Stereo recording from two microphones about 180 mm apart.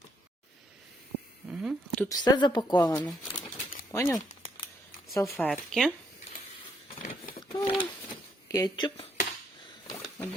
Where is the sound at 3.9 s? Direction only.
15° left (ahead or behind).